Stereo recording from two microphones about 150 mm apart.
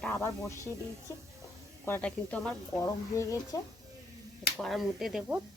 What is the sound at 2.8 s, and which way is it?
Speech, 20° left (ahead or behind).